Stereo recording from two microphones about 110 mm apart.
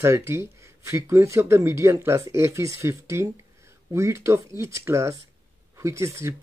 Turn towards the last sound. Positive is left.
turn(degrees=-25)  # may be behind; listen again after turning